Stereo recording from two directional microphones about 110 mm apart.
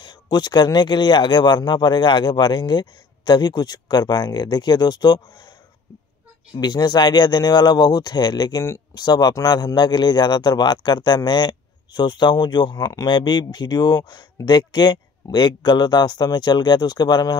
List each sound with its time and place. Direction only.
0.0 s speech: 45° left (ahead or behind)
6.5 s speech: 40° left (ahead or behind)